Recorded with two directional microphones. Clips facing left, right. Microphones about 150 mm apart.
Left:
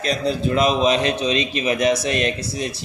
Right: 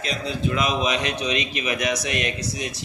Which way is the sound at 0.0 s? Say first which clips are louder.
Left 5 dB; 35° left (ahead or behind).